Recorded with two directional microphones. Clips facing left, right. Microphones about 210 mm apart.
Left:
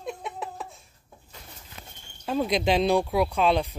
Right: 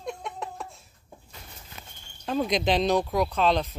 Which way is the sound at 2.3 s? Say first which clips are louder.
Left 1 dB; 5° left (ahead or behind).